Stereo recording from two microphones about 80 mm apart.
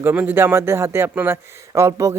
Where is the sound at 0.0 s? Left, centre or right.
Right.